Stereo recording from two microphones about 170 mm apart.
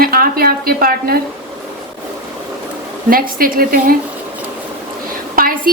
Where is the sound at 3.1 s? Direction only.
55° right (ahead or behind).